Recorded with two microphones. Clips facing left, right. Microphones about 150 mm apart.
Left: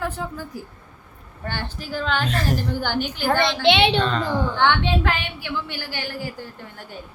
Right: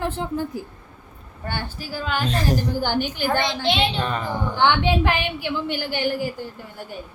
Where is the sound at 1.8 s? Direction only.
10° right (ahead or behind).